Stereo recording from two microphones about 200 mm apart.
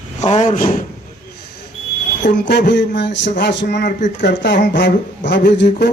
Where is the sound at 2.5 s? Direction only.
60° left (ahead or behind).